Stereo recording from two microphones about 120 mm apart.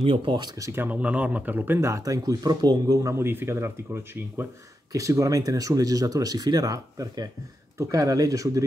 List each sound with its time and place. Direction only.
0.0 s speech: 50° right (ahead or behind)
0.6 s speech: 25° right (ahead or behind)
0.8 s speech: 10° right (ahead or behind); by 8.6 s 30° right (ahead or behind)